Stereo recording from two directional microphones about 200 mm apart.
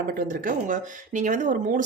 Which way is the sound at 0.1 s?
45° right (ahead or behind).